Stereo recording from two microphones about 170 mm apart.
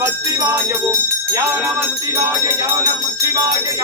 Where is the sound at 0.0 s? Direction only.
15° right (ahead or behind).